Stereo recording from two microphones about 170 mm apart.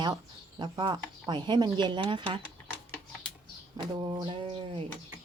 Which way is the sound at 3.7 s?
25° right (ahead or behind).